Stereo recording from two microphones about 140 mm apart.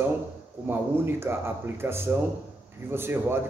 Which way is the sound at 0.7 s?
15° right (ahead or behind).